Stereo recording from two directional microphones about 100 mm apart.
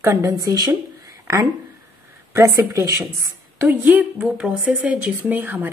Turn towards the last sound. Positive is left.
turn(degrees=-20)  # may be behind; listen again after turning